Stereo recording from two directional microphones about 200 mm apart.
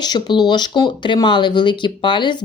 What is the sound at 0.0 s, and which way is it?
Speech, 20° left (ahead or behind).